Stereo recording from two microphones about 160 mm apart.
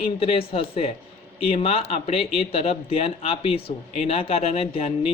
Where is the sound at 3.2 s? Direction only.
35° left (ahead or behind).